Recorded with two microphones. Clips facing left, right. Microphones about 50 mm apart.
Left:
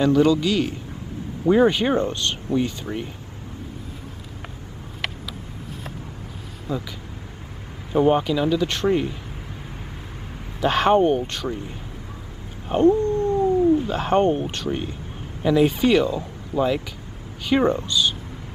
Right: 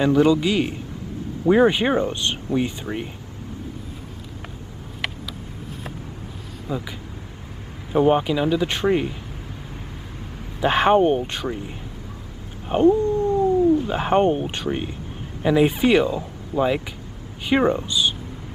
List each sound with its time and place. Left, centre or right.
0.0 s speech: centre
6.7 s speech: centre
7.9 s speech: centre
10.6 s speech: centre
12.6 s cat: centre
13.8 s speech: centre